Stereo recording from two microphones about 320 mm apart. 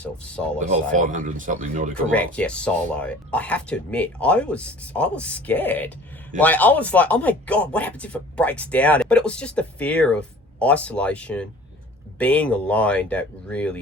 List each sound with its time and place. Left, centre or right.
0.0 s speech: centre
0.9 s speech: right
2.0 s speech: centre